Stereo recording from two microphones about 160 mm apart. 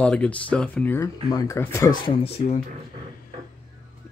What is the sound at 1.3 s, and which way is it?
Speech, 20° left (ahead or behind).